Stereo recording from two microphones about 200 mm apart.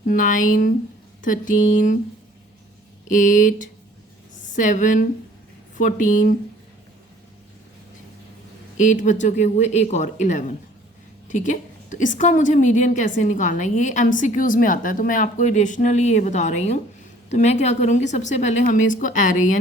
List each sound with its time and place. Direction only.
0.0 s a woman's voice: 40° left (ahead or behind)
3.1 s a woman's voice: 40° left (ahead or behind)
8.8 s a woman's voice: 40° left (ahead or behind)